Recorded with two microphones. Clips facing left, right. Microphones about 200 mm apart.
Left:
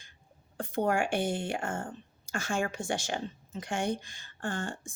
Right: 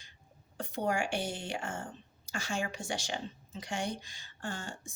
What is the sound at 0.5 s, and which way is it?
A woman's voice, 50° left (ahead or behind).